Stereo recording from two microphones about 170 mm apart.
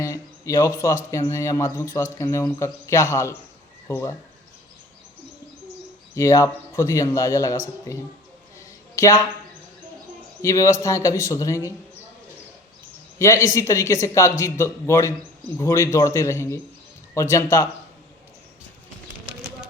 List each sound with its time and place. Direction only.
0.0 s a sound: 20° left (ahead or behind)
1.3 s speech: 15° left (ahead or behind)
6.1 s a man's voice: 20° left (ahead or behind)
8.5 s a sound: 20° left (ahead or behind)
10.4 s a man's voice: 20° left (ahead or behind)
13.1 s speech: 20° left (ahead or behind)